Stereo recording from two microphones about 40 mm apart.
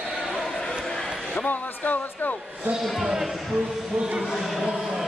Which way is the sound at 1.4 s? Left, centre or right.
Left.